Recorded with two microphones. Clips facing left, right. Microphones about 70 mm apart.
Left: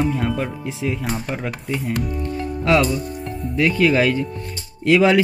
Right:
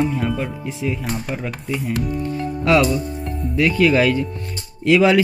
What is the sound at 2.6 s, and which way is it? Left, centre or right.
Speech, left.